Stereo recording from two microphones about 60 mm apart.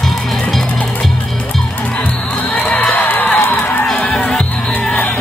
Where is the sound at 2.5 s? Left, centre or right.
Left.